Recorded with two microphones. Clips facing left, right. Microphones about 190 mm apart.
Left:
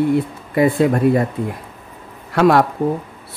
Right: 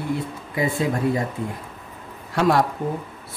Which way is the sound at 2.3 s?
65° left (ahead or behind).